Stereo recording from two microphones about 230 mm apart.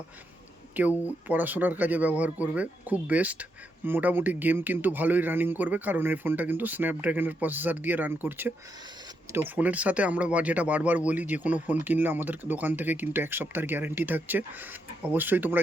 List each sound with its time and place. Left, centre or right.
0.8 s speech: centre